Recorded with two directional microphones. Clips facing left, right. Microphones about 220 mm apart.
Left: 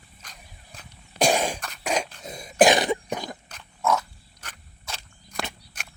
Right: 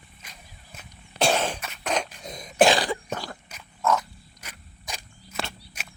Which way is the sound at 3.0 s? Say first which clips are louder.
Left 2 dB; 15° left (ahead or behind).